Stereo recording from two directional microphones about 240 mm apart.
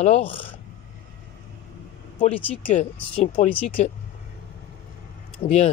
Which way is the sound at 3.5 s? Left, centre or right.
Left.